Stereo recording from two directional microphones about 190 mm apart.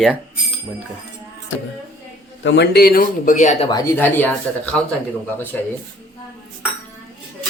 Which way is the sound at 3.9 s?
10° left (ahead or behind).